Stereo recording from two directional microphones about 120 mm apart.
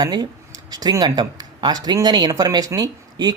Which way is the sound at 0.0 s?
35° right (ahead or behind).